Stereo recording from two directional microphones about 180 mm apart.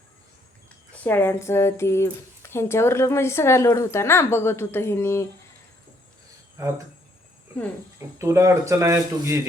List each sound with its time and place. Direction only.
1.0 s a woman's voice: 10° left (ahead or behind)
7.9 s speech: 15° right (ahead or behind)